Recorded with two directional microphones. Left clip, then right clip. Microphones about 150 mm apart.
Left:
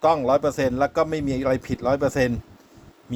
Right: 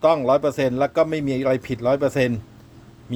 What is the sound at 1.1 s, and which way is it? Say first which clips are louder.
A man's voice: right 2 dB; 35° right (ahead or behind).